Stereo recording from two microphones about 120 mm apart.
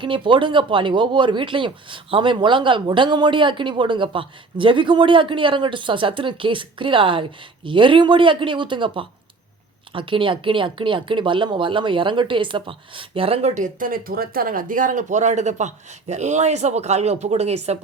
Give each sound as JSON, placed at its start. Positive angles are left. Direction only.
{"t": 0.0, "sound": "speech", "side_deg": -45}
{"t": 13.5, "sound": "speech", "side_deg": -90}